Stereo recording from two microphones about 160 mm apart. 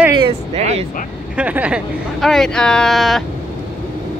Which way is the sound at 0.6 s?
45° right (ahead or behind).